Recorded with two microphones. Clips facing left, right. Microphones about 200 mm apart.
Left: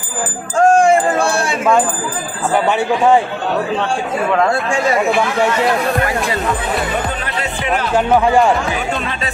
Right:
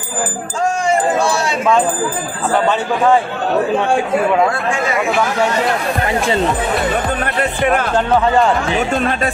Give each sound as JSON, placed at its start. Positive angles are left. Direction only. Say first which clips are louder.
{"t": 0.6, "sound": "a sound", "louder": "left 6 dB", "side_deg": 50}
{"t": 2.5, "sound": "a man's voice", "louder": "left 1 dB", "side_deg": 15}
{"t": 7.3, "sound": "speech", "louder": "right 4 dB", "side_deg": -50}
{"t": 7.9, "sound": "a man's voice", "louder": "left 1 dB", "side_deg": 10}